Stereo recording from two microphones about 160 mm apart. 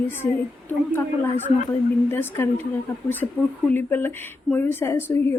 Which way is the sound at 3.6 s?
10° left (ahead or behind).